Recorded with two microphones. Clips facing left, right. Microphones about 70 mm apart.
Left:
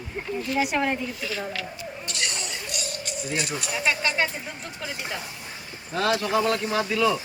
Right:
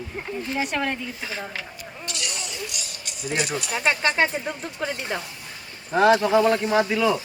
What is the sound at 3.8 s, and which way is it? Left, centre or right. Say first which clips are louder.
Speech: right 3 dB; right.